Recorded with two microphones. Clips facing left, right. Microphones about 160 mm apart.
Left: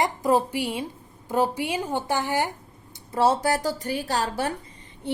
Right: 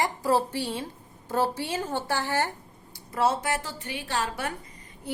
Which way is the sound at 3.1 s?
30° left (ahead or behind).